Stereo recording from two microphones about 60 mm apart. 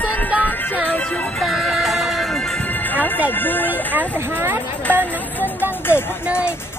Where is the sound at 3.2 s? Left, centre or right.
Left.